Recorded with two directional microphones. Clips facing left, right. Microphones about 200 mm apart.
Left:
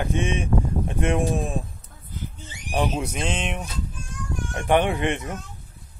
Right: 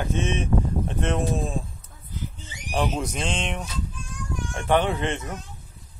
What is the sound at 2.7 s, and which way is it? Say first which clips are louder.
A man's voice: left 1 dB; 10° left (ahead or behind).